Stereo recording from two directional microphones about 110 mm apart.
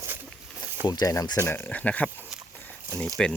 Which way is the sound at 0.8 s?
40° left (ahead or behind).